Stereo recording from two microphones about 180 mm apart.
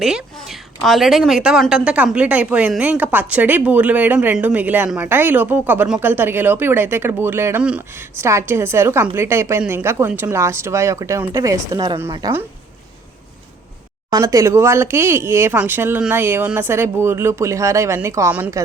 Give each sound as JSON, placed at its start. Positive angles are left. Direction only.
{"t": 0.0, "sound": "a woman's voice", "side_deg": -5}
{"t": 14.1, "sound": "a woman's voice", "side_deg": -20}